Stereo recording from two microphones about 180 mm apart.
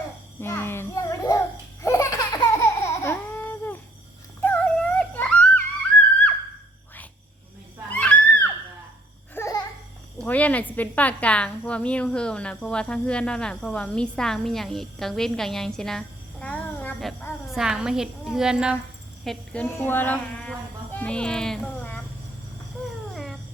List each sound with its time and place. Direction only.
0.3 s child singing: 15° left (ahead or behind)
1.8 s laughter: 15° left (ahead or behind)
4.4 s music: 10° left (ahead or behind)
7.9 s a sound: 10° left (ahead or behind)
10.2 s a woman's voice: 10° left (ahead or behind)
19.8 s a sound: 10° left (ahead or behind)
20.9 s a child's voice: 5° left (ahead or behind)
23.1 s cat: centre (ahead or behind)